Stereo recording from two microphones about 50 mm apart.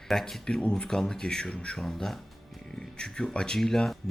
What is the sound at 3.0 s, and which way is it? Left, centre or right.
Speech, centre.